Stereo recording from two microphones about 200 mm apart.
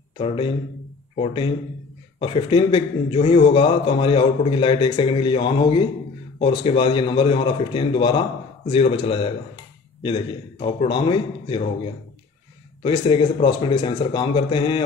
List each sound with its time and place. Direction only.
1.1 s speech: 30° left (ahead or behind)
12.8 s speech: 25° left (ahead or behind)